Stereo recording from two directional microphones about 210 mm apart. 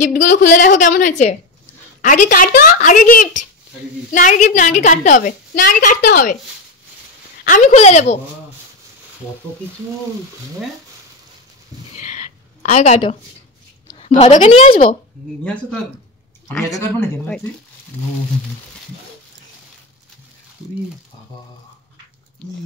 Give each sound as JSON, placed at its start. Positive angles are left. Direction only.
{"t": 0.0, "sound": "a woman's voice", "side_deg": 35}
{"t": 7.4, "sound": "a woman's voice", "side_deg": 40}
{"t": 12.0, "sound": "a sound", "side_deg": 40}
{"t": 14.0, "sound": "a woman's voice", "side_deg": 30}
{"t": 16.4, "sound": "speech", "side_deg": 10}